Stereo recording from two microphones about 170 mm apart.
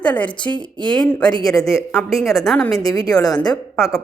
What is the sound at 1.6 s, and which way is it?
Speech, 15° left (ahead or behind).